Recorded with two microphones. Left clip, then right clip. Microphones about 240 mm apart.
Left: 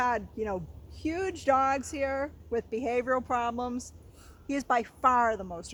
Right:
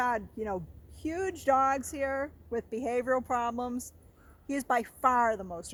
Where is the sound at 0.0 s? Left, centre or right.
Right.